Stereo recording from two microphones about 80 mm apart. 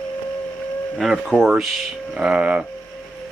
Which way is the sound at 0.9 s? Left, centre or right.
Centre.